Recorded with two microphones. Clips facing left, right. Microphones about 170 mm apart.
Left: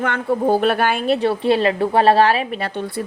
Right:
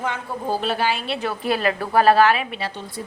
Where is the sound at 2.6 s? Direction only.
55° left (ahead or behind).